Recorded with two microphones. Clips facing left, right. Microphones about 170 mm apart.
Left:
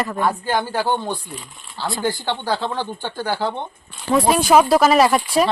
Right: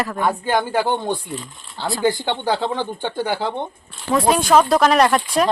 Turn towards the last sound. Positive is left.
turn(degrees=0)  # may be behind; listen again after turning